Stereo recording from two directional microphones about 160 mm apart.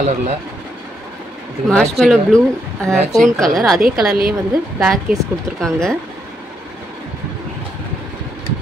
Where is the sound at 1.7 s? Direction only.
5° left (ahead or behind).